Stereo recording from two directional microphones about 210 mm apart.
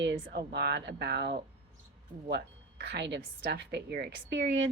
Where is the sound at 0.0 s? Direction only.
55° right (ahead or behind).